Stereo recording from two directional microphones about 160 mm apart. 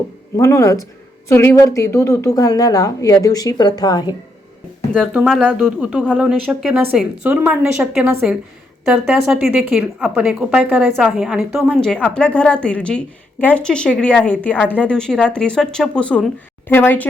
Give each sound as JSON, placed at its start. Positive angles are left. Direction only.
{"t": 0.3, "sound": "a woman's voice", "side_deg": 20}
{"t": 5.1, "sound": "a woman's voice", "side_deg": 0}
{"t": 5.6, "sound": "a woman's voice", "side_deg": -10}